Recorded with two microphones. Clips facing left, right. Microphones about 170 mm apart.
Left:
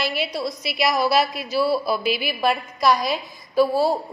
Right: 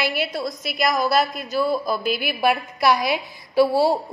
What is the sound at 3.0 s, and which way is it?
Speech, 65° right (ahead or behind).